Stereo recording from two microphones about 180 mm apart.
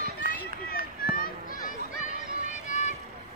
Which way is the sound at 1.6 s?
40° left (ahead or behind).